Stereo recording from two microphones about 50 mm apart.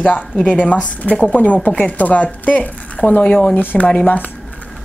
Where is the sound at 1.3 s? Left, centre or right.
Left.